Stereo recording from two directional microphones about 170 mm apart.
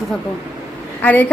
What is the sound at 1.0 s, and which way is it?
Speech, 10° left (ahead or behind).